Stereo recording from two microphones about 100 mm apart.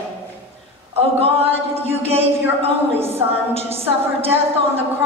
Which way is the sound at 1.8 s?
80° right.